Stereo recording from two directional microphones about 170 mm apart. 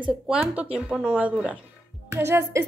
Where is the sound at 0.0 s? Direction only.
5° right (ahead or behind).